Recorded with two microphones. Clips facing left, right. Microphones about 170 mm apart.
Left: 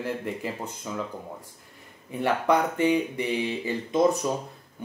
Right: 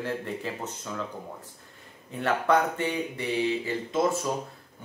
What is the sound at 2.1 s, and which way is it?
Speech, 15° left (ahead or behind).